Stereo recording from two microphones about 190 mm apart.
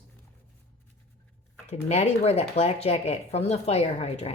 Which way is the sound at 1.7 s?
35° left (ahead or behind).